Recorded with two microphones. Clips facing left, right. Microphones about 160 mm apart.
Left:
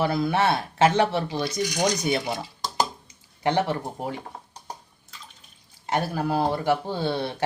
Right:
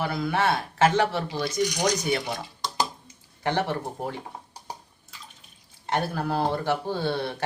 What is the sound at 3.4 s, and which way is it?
Speech, 15° left (ahead or behind).